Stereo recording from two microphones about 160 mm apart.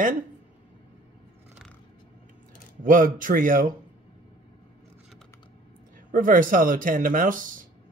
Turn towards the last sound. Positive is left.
turn(degrees=-55)  # may be behind; listen again after turning